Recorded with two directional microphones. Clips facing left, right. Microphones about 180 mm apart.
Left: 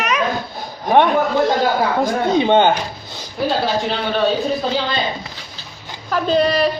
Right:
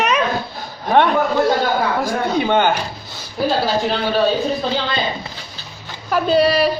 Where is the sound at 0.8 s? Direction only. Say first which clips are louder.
Left 1 dB; 15° left (ahead or behind).